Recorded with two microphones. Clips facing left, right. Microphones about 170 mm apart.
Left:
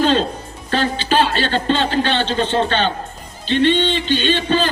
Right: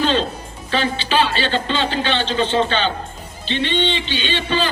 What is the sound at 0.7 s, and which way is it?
A man's voice, 45° left (ahead or behind).